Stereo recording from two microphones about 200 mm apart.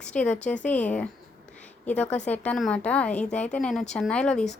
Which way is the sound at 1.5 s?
5° left (ahead or behind).